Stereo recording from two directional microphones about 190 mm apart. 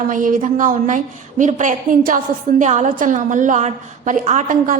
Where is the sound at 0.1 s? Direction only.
45° right (ahead or behind).